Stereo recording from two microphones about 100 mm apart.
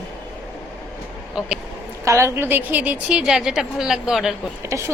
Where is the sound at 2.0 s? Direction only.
30° right (ahead or behind); by 4.3 s 5° right (ahead or behind).